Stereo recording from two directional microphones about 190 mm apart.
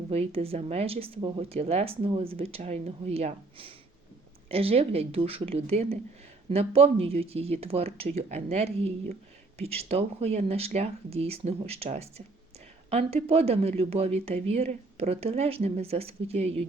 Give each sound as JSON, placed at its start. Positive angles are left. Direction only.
{"t": 0.1, "sound": "speech", "side_deg": -30}